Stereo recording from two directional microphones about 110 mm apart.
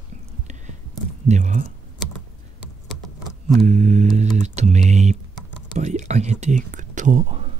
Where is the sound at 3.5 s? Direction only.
90° right.